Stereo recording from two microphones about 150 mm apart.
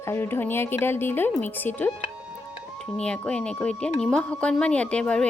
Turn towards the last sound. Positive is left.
turn(degrees=5)  # may be behind; listen again after turning